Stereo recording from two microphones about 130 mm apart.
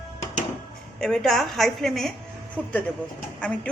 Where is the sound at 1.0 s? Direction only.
5° left (ahead or behind).